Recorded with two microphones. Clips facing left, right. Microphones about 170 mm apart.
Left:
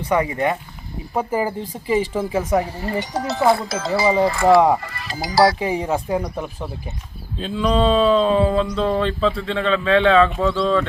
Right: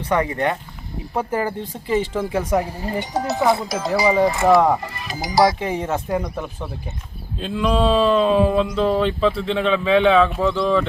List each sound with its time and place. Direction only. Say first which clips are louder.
0.0 s speech: left 1 dB; 10° left (ahead or behind)
2.6 s speech: left 1 dB; 15° right (ahead or behind)
5.5 s speech: left 2 dB; 5° left (ahead or behind)
7.3 s speech: left 1 dB; 5° right (ahead or behind)